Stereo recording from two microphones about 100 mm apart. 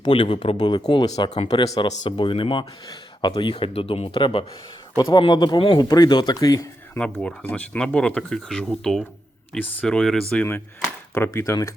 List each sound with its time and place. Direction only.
0.0 s speech: 55° left (ahead or behind)
0.9 s speech: 45° left (ahead or behind)
1.8 s speech: 60° left (ahead or behind)
2.8 s speech: 45° left (ahead or behind)
3.5 s speech: 70° left (ahead or behind)
4.2 s speech: 60° left (ahead or behind)
4.9 s speech: 50° left (ahead or behind)
5.5 s speech: 60° left (ahead or behind)
5.9 s speech: 45° left (ahead or behind)
6.9 s speech: 10° left (ahead or behind)
11.1 s speech: 25° left (ahead or behind)